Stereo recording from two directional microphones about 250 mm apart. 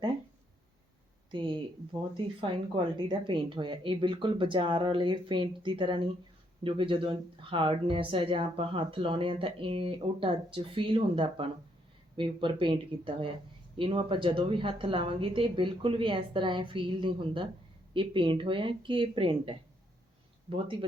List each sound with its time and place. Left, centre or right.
1.3 s speech: centre